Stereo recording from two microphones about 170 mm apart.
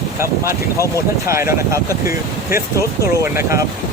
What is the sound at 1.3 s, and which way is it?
Speech, 15° right (ahead or behind).